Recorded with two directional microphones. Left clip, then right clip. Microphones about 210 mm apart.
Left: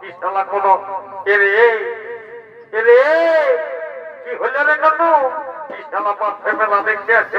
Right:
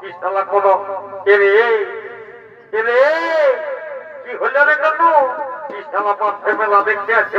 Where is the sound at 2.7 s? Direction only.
30° left (ahead or behind).